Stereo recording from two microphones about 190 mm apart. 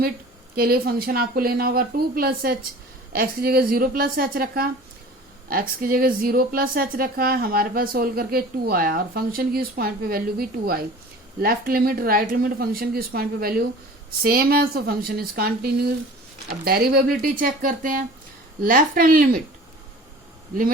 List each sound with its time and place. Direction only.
0.5 s speech: 50° right (ahead or behind)